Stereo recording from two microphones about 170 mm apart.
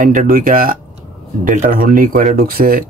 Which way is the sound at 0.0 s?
50° right (ahead or behind).